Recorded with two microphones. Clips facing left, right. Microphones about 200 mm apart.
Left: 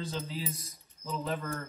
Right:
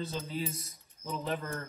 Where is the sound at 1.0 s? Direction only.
15° right (ahead or behind).